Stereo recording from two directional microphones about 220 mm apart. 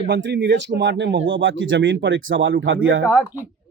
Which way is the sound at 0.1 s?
55° right (ahead or behind).